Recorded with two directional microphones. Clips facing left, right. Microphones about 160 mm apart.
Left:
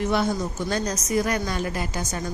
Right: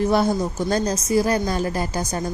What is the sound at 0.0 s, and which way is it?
A woman's voice, 35° right (ahead or behind).